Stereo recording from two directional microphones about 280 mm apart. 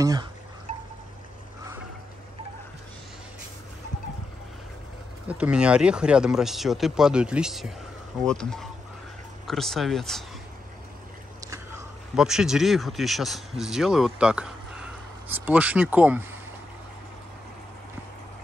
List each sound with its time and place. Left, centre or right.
0.0 s wind chime: centre
5.3 s speech: centre
11.4 s speech: centre